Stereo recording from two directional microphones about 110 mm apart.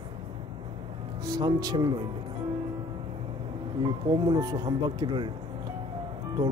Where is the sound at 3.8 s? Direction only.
40° right (ahead or behind).